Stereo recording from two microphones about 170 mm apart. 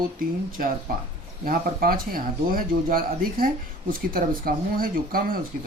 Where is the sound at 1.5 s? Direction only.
60° right (ahead or behind).